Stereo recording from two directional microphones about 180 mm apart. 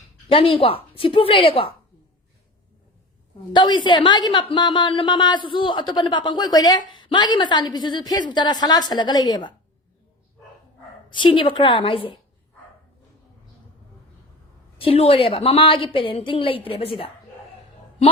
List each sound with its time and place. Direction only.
0.3 s a woman's voice: 30° left (ahead or behind)
3.5 s a woman's voice: 25° left (ahead or behind)
11.1 s a woman's voice: 30° left (ahead or behind)
14.8 s a woman's voice: 35° left (ahead or behind)